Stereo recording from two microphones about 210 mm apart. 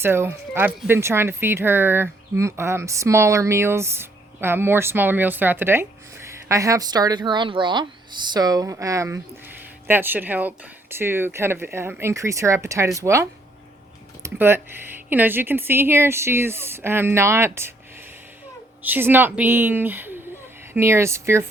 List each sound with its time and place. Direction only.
0.0 s speech: 10° right (ahead or behind)
18.8 s speech: 10° right (ahead or behind)